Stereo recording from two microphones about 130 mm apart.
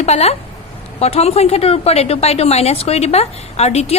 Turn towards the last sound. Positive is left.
turn(degrees=55)  # may be behind; listen again after turning